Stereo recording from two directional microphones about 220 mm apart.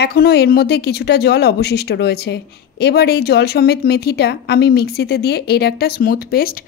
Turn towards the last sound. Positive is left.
turn(degrees=40)  # may be behind; listen again after turning